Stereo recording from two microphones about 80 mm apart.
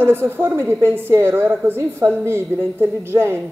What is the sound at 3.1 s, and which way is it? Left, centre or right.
Speech, right.